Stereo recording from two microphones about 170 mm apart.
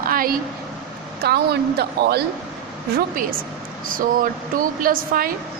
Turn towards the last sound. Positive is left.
turn(degrees=-55)  # may be behind; listen again after turning